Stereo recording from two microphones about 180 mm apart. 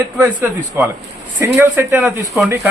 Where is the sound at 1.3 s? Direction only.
15° right (ahead or behind).